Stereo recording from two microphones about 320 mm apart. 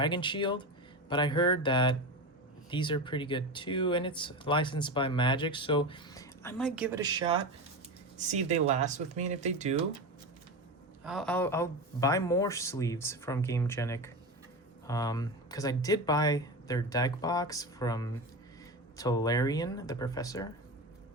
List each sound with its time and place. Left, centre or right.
0.0 s speech: centre; by 9.8 s right
11.0 s speech: centre